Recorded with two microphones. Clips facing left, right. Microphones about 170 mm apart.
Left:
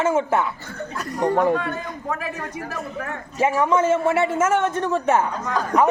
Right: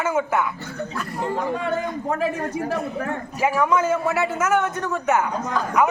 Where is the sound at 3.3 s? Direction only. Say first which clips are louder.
Left 2 dB; 25° left (ahead or behind).